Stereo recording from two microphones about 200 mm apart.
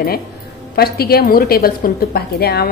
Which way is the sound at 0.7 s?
50° left (ahead or behind).